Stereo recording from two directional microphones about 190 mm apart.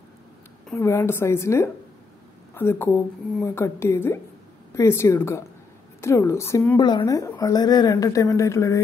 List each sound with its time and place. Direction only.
0.7 s speech: 15° left (ahead or behind)
6.8 s speech: 25° left (ahead or behind)